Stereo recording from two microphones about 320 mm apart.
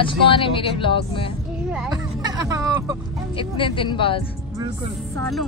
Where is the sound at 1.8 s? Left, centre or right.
Centre.